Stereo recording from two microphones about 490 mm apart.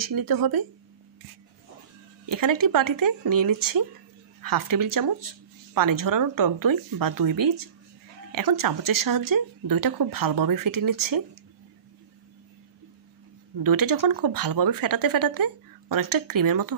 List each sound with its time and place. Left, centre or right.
0.0 s speech: right
2.2 s speech: right
13.6 s speech: right